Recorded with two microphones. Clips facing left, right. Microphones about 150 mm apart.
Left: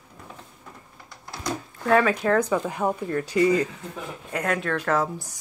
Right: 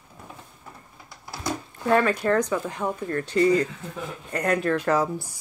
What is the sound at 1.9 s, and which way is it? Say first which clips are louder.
Speech: left 1 dB; 5° left (ahead or behind).